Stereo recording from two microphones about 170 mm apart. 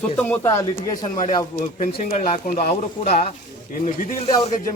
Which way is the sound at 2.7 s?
40° left (ahead or behind).